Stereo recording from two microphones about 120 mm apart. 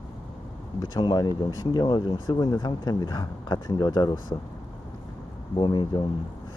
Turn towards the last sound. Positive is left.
turn(degrees=40)  # may be behind; listen again after turning